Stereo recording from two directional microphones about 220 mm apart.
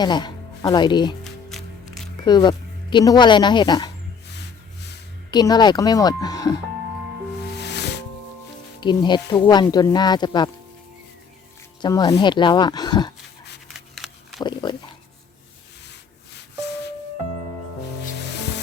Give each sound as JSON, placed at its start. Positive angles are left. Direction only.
{"t": 0.0, "sound": "speech", "side_deg": 20}
{"t": 1.2, "sound": "music", "side_deg": 0}
{"t": 2.2, "sound": "speech", "side_deg": 20}
{"t": 5.3, "sound": "a woman's voice", "side_deg": 20}
{"t": 7.5, "sound": "music", "side_deg": 50}
{"t": 8.8, "sound": "speech", "side_deg": 20}
{"t": 11.8, "sound": "speech", "side_deg": 20}
{"t": 13.7, "sound": "a sound", "side_deg": 0}
{"t": 14.4, "sound": "dog", "side_deg": 20}
{"t": 16.3, "sound": "music", "side_deg": 50}